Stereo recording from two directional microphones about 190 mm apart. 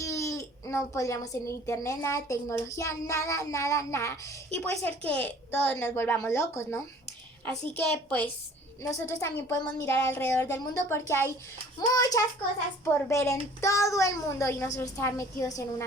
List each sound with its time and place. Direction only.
0.0 s a child's voice: 15° left (ahead or behind)